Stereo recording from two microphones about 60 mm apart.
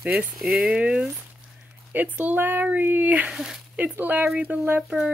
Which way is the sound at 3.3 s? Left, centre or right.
Centre.